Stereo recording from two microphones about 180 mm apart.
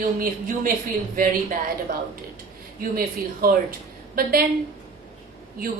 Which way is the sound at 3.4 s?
55° right (ahead or behind).